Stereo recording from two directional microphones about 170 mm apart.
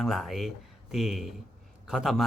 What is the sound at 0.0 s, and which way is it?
Speech, centre (ahead or behind).